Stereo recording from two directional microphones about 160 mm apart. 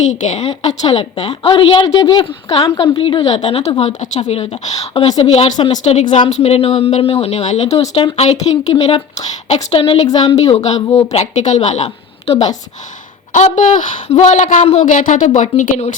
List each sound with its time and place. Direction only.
0.2 s a woman's voice: 50° left (ahead or behind)
1.3 s a woman's voice: 30° left (ahead or behind)
5.5 s a woman's voice: 25° left (ahead or behind)
5.8 s a woman's voice: 45° left (ahead or behind)
10.3 s a woman's voice: 45° left (ahead or behind)